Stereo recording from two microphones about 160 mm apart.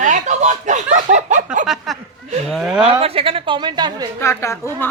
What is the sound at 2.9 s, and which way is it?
Speech, 40° right (ahead or behind).